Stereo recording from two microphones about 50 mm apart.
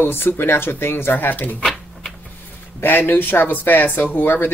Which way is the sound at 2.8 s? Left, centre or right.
Left.